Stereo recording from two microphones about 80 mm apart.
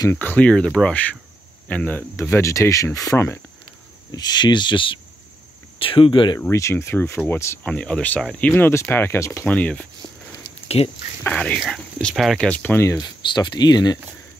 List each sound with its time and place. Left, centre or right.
0.1 s speech: left
0.7 s speech: centre
1.7 s speech: centre
2.1 s speech: left
4.1 s speech: left
6.5 s speech: left
7.6 s speech: centre; by 9.5 s left
9.5 s speech: centre
11.2 s speech: centre
11.7 s speech: centre
12.4 s speech: centre
12.9 s speech: left